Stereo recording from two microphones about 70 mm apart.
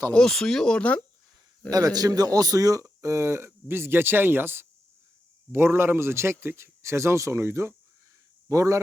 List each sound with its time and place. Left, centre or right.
0.1 s speech: centre
1.7 s a man's voice: right
2.8 s speech: right